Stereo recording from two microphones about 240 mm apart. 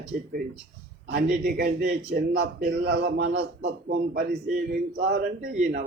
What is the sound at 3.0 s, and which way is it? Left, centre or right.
Speech, right.